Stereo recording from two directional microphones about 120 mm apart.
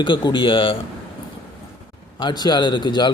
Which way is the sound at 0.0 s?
40° left (ahead or behind).